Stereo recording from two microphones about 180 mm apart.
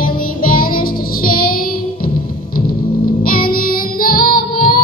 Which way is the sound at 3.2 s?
55° left (ahead or behind).